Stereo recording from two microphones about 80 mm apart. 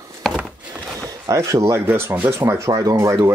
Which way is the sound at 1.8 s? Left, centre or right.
Right.